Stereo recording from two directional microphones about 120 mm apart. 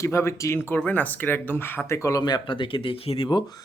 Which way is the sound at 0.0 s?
25° left (ahead or behind).